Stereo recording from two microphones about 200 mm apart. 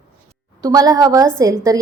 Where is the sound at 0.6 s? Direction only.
20° right (ahead or behind).